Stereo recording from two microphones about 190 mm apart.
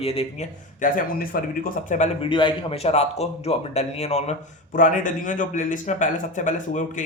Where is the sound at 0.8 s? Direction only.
50° left (ahead or behind).